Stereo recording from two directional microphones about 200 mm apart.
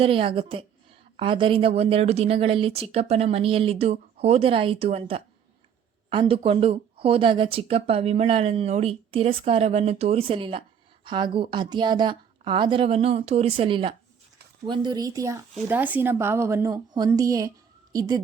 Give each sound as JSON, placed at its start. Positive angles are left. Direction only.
{"t": 0.0, "sound": "a woman's voice", "side_deg": -25}